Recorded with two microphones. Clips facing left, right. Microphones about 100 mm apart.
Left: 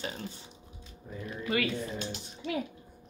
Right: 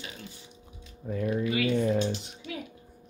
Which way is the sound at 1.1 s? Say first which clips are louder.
Right 11 dB; 90° right.